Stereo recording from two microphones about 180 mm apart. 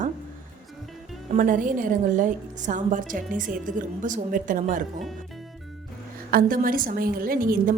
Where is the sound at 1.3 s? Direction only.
50° right (ahead or behind).